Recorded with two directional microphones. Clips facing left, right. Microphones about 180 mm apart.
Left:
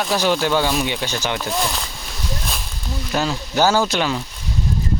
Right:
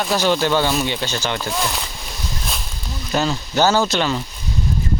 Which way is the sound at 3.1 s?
5° left (ahead or behind).